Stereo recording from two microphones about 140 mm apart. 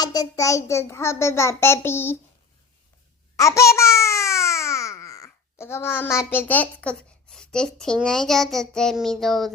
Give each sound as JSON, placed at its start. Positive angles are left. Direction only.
{"t": 0.0, "sound": "a child's voice", "side_deg": 25}
{"t": 3.3, "sound": "babbling", "side_deg": 20}